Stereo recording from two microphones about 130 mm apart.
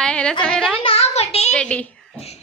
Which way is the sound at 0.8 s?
50° left (ahead or behind).